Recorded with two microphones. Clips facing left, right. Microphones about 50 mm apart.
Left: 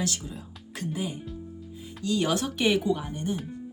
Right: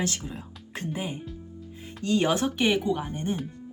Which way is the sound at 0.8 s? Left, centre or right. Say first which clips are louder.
Even; right.